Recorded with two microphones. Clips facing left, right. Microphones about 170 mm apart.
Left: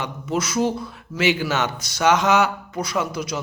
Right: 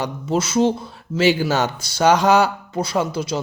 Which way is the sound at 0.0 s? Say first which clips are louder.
Right 3 dB; 30° right (ahead or behind).